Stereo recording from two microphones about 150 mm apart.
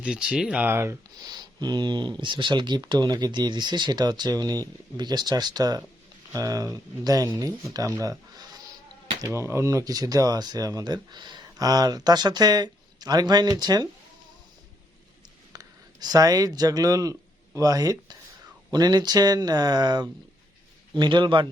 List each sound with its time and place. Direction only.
0.0 s speech: 5° right (ahead or behind); by 8.1 s 20° right (ahead or behind)
9.2 s speech: 20° right (ahead or behind)
15.5 s a man's voice: 25° right (ahead or behind)